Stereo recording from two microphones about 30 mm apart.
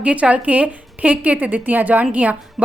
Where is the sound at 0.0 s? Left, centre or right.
Right.